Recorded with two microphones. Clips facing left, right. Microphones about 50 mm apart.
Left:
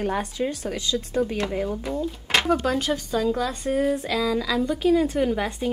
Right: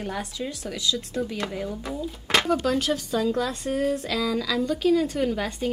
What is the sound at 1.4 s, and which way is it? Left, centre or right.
A woman's voice, left.